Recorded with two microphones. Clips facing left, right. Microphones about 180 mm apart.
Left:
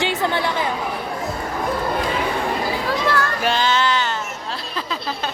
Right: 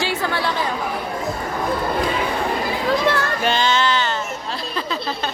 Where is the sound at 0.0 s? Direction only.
20° left (ahead or behind).